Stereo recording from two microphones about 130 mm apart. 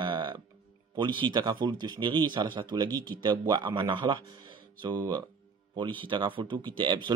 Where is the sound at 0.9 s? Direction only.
35° right (ahead or behind).